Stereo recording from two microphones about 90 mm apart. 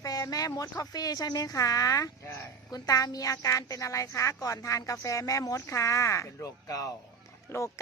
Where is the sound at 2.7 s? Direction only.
40° left (ahead or behind).